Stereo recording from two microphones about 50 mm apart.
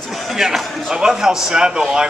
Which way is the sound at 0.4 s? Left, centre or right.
Centre.